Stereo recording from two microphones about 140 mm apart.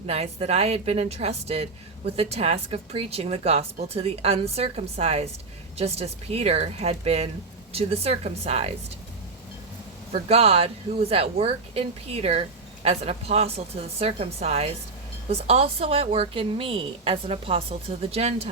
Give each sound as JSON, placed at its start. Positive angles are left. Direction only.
{"t": 0.1, "sound": "speech", "side_deg": -50}
{"t": 10.1, "sound": "speech", "side_deg": -45}